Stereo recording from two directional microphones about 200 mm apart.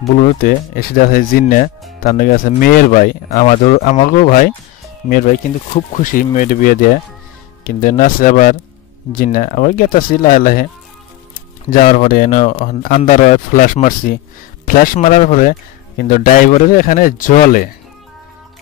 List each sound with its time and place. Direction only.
0.4 s speech: 45° left (ahead or behind)
11.7 s speech: 40° left (ahead or behind)